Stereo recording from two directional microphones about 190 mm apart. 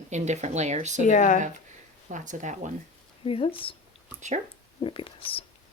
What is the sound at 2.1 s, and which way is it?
Speech, 40° right (ahead or behind).